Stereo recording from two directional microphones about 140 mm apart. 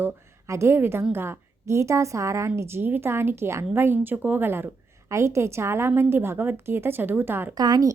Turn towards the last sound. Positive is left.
turn(degrees=-30)  # may be behind; listen again after turning